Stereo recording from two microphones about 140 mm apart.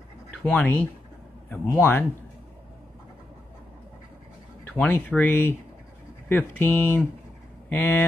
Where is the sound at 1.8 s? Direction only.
15° left (ahead or behind).